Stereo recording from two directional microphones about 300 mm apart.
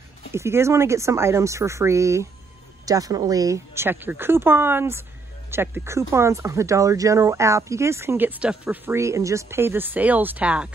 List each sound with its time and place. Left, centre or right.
0.3 s speech: centre